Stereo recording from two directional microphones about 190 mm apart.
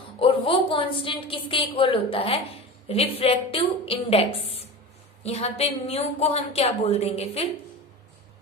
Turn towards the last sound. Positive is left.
turn(degrees=35)  # may be behind; listen again after turning